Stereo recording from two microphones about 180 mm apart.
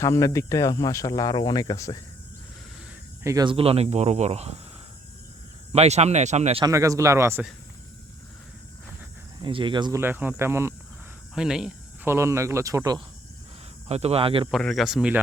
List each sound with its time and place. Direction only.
0.0 s speech: 15° left (ahead or behind)
3.2 s speech: 25° right (ahead or behind)
5.7 s speech: 35° right (ahead or behind)
6.7 s speech: 15° right (ahead or behind)
9.4 s speech: 30° right (ahead or behind)
10.0 s speech: 10° right (ahead or behind)
11.3 s cricket: 5° right (ahead or behind)
12.1 s speech: 15° right (ahead or behind)
13.8 s speech: 35° right (ahead or behind)
14.5 s speech: centre (ahead or behind)